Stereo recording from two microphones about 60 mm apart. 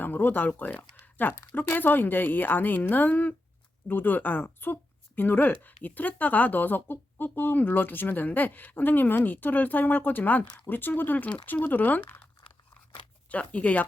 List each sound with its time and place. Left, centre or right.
0.0 s speech: left
13.3 s speech: left